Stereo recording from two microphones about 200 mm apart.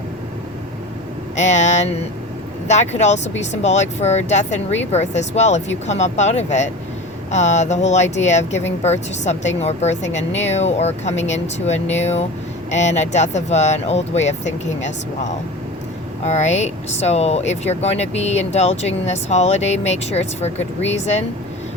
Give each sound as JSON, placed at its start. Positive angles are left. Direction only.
{"t": 1.4, "sound": "speech", "side_deg": 35}